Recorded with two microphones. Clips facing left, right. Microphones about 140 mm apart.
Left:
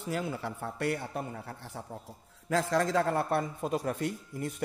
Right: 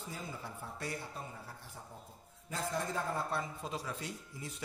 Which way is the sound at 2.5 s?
90° left.